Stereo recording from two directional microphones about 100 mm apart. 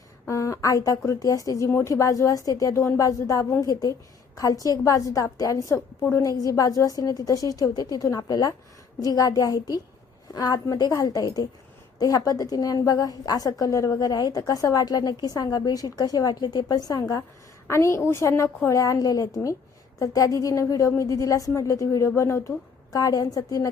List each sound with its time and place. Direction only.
0.3 s a woman's voice: 30° left (ahead or behind)